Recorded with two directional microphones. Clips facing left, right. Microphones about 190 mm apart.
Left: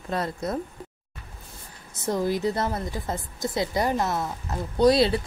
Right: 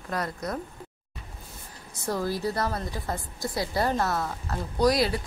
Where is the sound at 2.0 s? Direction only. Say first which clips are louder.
Left 4 dB; 20° left (ahead or behind).